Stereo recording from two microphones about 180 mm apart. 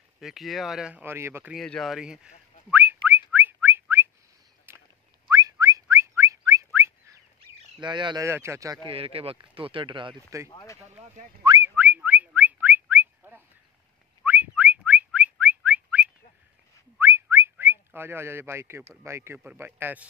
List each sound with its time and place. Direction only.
0.2 s speech: centre (ahead or behind)
1.5 s whistling: centre (ahead or behind)
5.3 s whistling: 20° right (ahead or behind)
7.3 s speech: 25° right (ahead or behind)
8.9 s speech: 30° right (ahead or behind)
10.5 s speech: 20° left (ahead or behind)
11.4 s whistling: 15° right (ahead or behind)
19.0 s speech: 15° right (ahead or behind)